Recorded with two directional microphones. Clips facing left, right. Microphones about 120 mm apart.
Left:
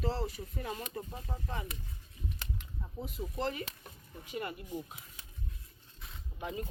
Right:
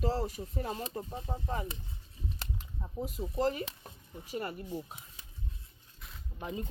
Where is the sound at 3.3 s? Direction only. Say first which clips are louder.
Right 5 dB; 40° right (ahead or behind).